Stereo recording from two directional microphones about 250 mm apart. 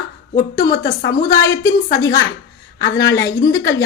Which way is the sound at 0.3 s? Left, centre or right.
Left.